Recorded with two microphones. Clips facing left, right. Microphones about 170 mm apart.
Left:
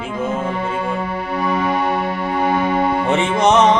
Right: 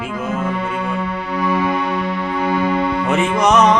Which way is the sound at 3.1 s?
25° left (ahead or behind).